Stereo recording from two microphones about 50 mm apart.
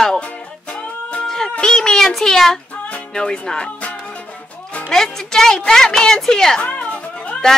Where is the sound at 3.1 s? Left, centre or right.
Centre.